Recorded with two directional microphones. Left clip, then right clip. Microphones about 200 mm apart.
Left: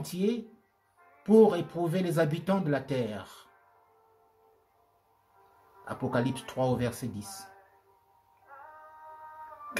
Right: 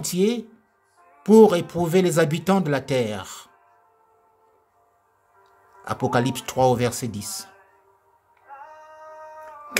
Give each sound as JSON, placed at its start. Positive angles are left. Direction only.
{"t": 0.0, "sound": "speech", "side_deg": -55}
{"t": 5.9, "sound": "speech", "side_deg": -50}